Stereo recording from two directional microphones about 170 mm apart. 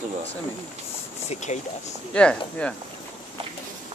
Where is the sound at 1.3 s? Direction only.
45° left (ahead or behind).